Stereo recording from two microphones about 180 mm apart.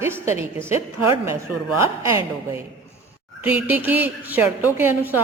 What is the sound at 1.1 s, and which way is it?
Speech, 15° right (ahead or behind).